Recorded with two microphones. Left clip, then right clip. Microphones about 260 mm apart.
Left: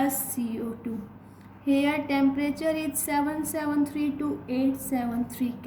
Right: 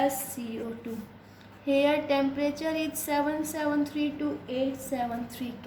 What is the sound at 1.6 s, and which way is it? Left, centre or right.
A woman's voice, centre.